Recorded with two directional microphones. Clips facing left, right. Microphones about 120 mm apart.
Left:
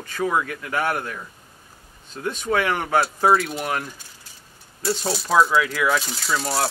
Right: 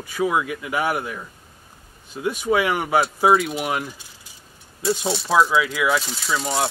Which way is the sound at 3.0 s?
Centre (ahead or behind).